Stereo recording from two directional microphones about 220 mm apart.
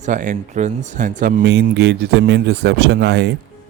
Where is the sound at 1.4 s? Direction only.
50° right (ahead or behind).